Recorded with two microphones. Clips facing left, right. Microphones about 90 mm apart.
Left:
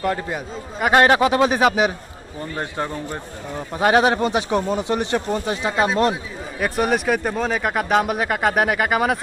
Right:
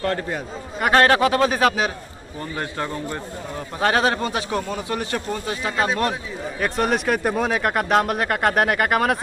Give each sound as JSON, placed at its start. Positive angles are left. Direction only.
{"t": 0.0, "sound": "a man's voice", "side_deg": 10}
{"t": 5.7, "sound": "a man's voice", "side_deg": 5}